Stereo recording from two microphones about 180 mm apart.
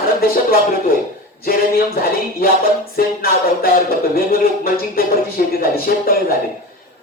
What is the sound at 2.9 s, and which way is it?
Music, 55° left (ahead or behind).